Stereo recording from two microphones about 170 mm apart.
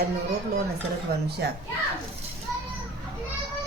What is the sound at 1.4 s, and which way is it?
Speech, 70° right (ahead or behind).